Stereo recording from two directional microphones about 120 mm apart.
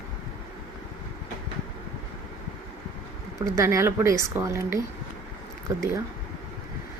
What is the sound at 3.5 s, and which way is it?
Speech, 25° right (ahead or behind).